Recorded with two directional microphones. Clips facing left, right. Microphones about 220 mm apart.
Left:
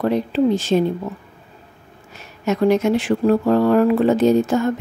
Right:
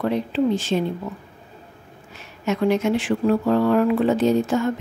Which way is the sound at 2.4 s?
40° left (ahead or behind).